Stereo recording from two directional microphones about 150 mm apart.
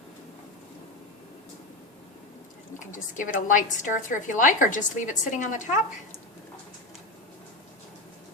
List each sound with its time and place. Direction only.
2.7 s a woman's voice: 60° left (ahead or behind)